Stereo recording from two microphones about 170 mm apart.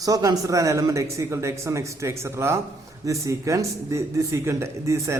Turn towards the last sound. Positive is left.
turn(degrees=-15)  # may be behind; listen again after turning